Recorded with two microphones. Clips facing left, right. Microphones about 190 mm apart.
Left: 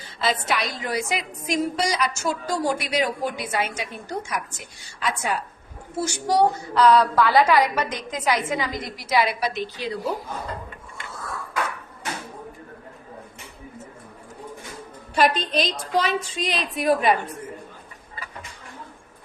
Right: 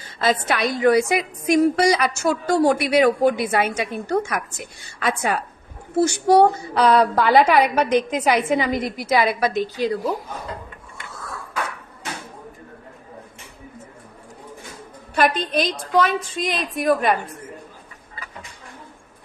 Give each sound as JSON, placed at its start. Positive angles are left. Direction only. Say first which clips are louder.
{"t": 0.2, "sound": "a woman's voice", "louder": "right 4 dB", "side_deg": -50}
{"t": 15.1, "sound": "a woman's voice", "louder": "right 1 dB", "side_deg": -55}